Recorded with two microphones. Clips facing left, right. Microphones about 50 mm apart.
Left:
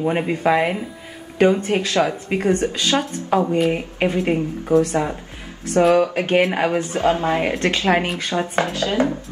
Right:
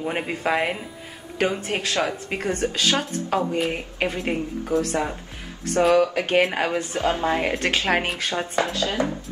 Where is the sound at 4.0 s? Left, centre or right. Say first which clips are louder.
Left 5 dB; centre; by 6.4 s left.